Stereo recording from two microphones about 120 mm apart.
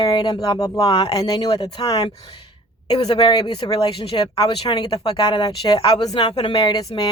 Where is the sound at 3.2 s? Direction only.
40° left (ahead or behind).